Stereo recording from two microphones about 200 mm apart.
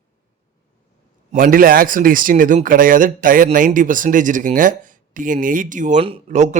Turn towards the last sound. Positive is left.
turn(degrees=-35)  # may be behind; listen again after turning